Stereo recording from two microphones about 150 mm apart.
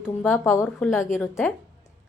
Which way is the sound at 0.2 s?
Centre (ahead or behind).